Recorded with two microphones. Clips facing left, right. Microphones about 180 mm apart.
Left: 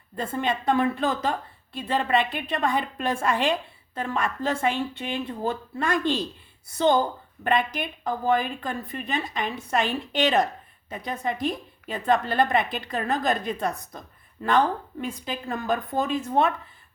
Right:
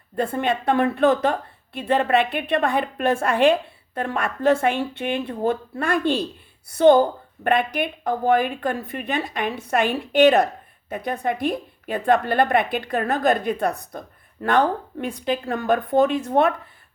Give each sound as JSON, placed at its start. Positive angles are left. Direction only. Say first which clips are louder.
{"t": 0.2, "sound": "a woman's voice", "louder": "right 5 dB", "side_deg": -60}